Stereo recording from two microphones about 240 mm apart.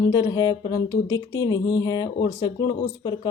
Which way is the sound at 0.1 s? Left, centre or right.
Centre.